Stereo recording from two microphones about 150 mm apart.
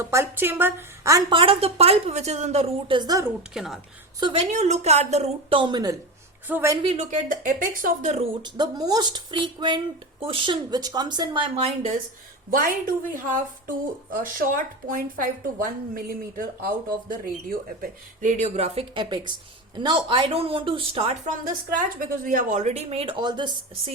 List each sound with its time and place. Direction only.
0.0 s a woman's voice: 20° right (ahead or behind)
1.3 s a woman's voice: 35° right (ahead or behind)
3.5 s a woman's voice: centre (ahead or behind)
4.2 s a woman's voice: 35° right (ahead or behind)
4.5 s speech: 50° right (ahead or behind); by 6.0 s 25° right (ahead or behind)
6.5 s a woman's voice: 15° right (ahead or behind)
6.8 s a woman's voice: 40° right (ahead or behind)
7.1 s a woman's voice: 65° right (ahead or behind)
8.4 s speech: 30° right (ahead or behind)
12.5 s a woman's voice: 70° right (ahead or behind)
17.7 s a woman's voice: 60° right (ahead or behind); by 21.2 s 40° right (ahead or behind)
21.8 s a woman's voice: 65° right (ahead or behind); by 23.1 s 40° right (ahead or behind)
23.2 s speech: 30° right (ahead or behind)